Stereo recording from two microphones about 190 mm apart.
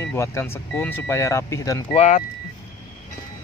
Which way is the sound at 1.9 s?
40° left (ahead or behind).